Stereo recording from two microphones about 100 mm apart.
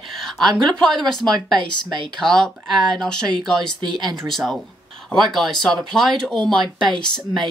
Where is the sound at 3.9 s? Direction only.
45° right (ahead or behind).